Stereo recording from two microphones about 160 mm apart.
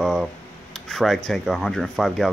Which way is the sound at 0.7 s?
Centre (ahead or behind).